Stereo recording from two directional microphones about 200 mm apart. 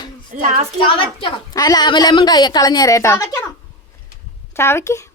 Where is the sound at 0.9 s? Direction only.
25° left (ahead or behind).